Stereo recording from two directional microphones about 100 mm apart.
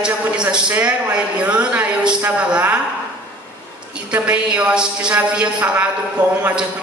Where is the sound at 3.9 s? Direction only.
10° right (ahead or behind).